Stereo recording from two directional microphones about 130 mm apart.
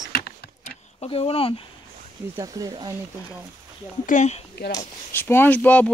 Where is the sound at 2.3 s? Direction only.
30° right (ahead or behind).